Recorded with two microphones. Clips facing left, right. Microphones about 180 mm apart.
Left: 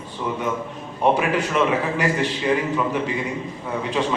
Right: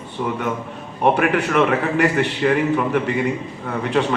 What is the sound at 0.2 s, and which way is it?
Speech, 55° right (ahead or behind).